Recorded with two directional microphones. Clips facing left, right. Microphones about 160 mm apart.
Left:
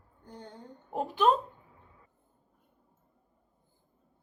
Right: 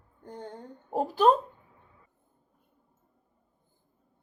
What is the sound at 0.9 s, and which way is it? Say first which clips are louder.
Speech: right 3 dB; 35° right (ahead or behind).